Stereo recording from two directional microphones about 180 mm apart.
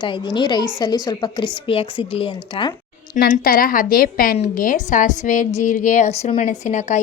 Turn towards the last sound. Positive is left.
turn(degrees=40)  # may be behind; listen again after turning